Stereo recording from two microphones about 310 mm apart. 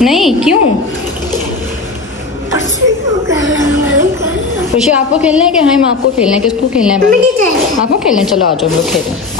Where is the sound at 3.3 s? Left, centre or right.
Left.